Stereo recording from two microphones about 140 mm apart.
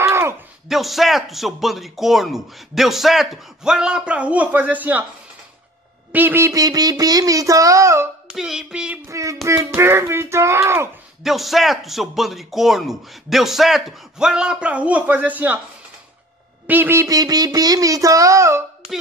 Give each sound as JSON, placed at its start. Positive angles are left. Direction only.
{"t": 0.0, "sound": "a sound", "side_deg": -20}
{"t": 0.7, "sound": "speech", "side_deg": 0}
{"t": 6.1, "sound": "speech", "side_deg": -15}
{"t": 8.3, "sound": "speech", "side_deg": -5}
{"t": 9.1, "sound": "speech", "side_deg": -20}
{"t": 11.2, "sound": "speech", "side_deg": 0}
{"t": 16.6, "sound": "speech", "side_deg": -15}